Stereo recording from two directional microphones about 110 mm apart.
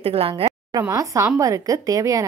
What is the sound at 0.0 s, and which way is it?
Speech, 60° right (ahead or behind).